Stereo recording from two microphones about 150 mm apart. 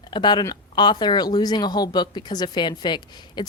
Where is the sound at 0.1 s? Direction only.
30° left (ahead or behind).